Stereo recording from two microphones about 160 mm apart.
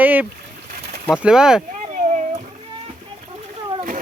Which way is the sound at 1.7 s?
50° right (ahead or behind).